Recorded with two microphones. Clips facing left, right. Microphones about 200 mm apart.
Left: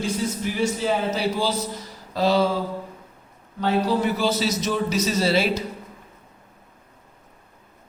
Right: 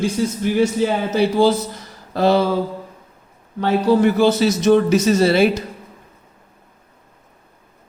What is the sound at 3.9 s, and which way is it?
A man's voice, 55° right (ahead or behind).